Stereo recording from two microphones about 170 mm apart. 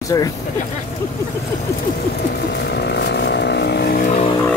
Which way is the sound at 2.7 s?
90° left.